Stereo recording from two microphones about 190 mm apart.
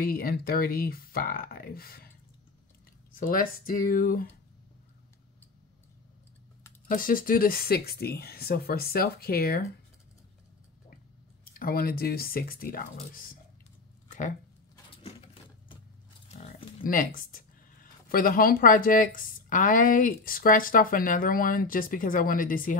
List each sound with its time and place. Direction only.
0.0 s speech: 50° left (ahead or behind)
3.2 s speech: 45° left (ahead or behind)
6.9 s speech: 45° left (ahead or behind)
11.5 s speech: 50° left (ahead or behind)
14.0 s a sound: 40° left (ahead or behind)
16.3 s pig: 35° left (ahead or behind)
16.8 s speech: 45° left (ahead or behind)